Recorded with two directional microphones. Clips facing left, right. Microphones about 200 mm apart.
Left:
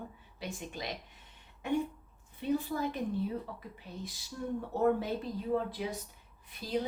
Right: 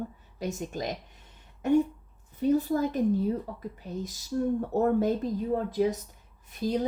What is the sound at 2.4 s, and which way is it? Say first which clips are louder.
Speech: right 7 dB; 40° right (ahead or behind).